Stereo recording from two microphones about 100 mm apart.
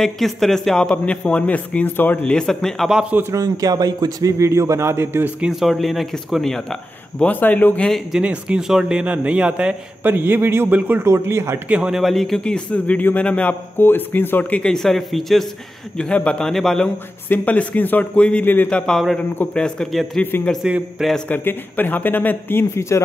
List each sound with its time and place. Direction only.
0.0 s a man's voice: 5° left (ahead or behind)
2.9 s a man's voice: 5° right (ahead or behind)
3.3 s speech: 40° right (ahead or behind); by 5.3 s 25° right (ahead or behind)
5.4 s speech: 5° right (ahead or behind); by 7.9 s 15° left (ahead or behind)
7.9 s a man's voice: 5° right (ahead or behind)
10.1 s a man's voice: 20° right (ahead or behind)
11.7 s a man's voice: 5° right (ahead or behind)
16.8 s a man's voice: 15° left (ahead or behind)
20.2 s a man's voice: 15° left (ahead or behind)